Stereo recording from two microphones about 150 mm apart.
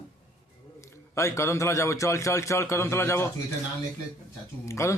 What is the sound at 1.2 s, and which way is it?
A man's voice, 20° left (ahead or behind).